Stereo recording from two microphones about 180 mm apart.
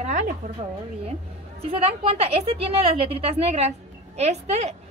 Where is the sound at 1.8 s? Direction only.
35° right (ahead or behind).